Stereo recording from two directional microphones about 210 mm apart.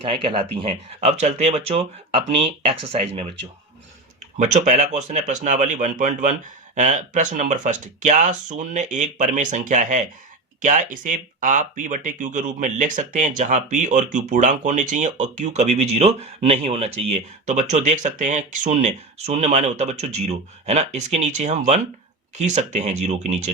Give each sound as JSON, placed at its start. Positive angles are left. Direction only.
{"t": 0.0, "sound": "speech", "side_deg": -25}
{"t": 4.4, "sound": "speech", "side_deg": -35}